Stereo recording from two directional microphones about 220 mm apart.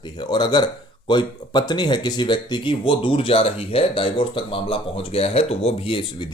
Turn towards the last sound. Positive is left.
turn(degrees=25)  # may be behind; listen again after turning